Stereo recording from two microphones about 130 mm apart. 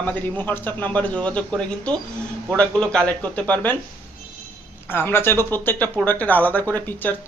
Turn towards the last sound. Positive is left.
turn(degrees=15)  # may be behind; listen again after turning